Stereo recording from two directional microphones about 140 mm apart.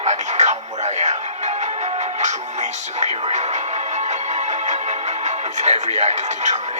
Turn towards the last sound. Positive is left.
turn(degrees=-55)  # may be behind; listen again after turning